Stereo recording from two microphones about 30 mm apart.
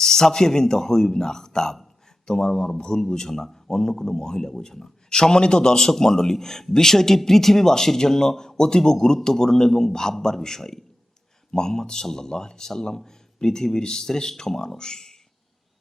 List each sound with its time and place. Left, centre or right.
0.0 s a man's voice: centre